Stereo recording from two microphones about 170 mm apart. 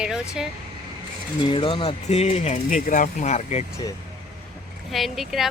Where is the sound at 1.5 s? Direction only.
30° left (ahead or behind).